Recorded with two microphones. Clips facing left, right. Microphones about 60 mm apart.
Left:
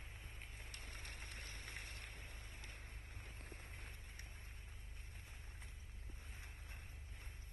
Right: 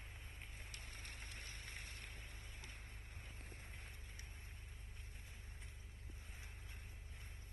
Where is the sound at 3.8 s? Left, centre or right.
Left.